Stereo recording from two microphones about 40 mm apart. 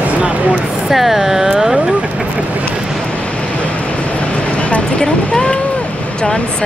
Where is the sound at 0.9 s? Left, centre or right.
Centre.